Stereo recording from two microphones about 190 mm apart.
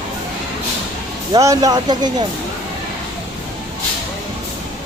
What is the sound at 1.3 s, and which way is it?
Speech, 20° right (ahead or behind).